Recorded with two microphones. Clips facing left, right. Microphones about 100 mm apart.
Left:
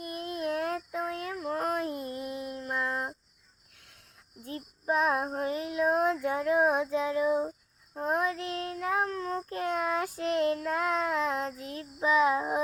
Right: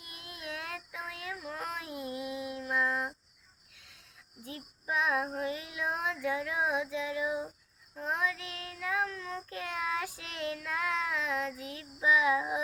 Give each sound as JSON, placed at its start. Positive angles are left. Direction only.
{"t": 0.0, "sound": "child singing", "side_deg": 45}
{"t": 2.6, "sound": "a sound", "side_deg": 40}
{"t": 4.4, "sound": "child singing", "side_deg": 45}